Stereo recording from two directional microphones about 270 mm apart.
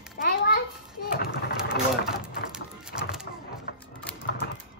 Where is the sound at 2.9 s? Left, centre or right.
Left.